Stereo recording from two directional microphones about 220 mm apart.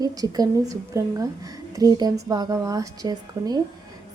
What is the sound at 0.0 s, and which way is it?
A woman's voice, 15° right (ahead or behind).